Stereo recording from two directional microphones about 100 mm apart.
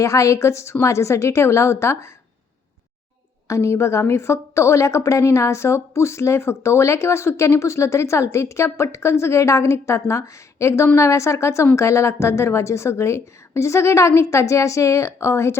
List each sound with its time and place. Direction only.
0.0 s a woman's voice: 30° left (ahead or behind)
3.4 s a woman's voice: 30° left (ahead or behind)